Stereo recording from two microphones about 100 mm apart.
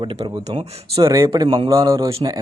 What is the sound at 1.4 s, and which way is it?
Speech, 60° right (ahead or behind).